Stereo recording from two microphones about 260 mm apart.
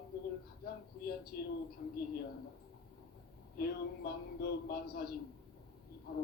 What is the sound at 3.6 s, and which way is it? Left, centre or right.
A man's voice, left.